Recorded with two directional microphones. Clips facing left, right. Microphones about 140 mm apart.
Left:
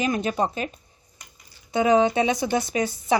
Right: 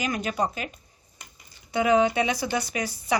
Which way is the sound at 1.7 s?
20° left (ahead or behind).